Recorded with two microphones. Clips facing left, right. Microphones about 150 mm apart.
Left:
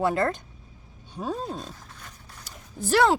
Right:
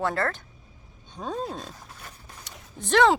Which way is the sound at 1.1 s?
5° left (ahead or behind).